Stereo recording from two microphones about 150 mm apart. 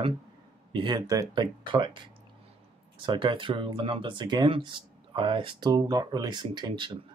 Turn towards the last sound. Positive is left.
turn(degrees=-35)  # may be behind; listen again after turning